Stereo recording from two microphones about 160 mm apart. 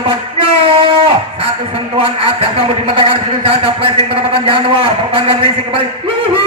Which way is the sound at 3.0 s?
35° right (ahead or behind).